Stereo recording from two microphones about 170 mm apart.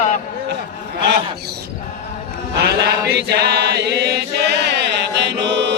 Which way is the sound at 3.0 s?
75° right (ahead or behind).